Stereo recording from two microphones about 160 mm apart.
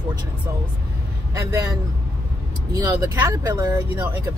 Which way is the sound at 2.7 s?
20° right (ahead or behind).